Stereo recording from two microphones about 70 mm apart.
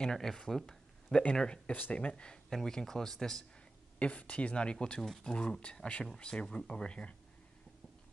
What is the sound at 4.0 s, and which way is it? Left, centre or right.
Speech, centre.